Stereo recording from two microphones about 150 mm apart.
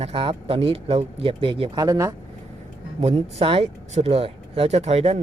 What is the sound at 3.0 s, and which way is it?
Speech, 45° right (ahead or behind).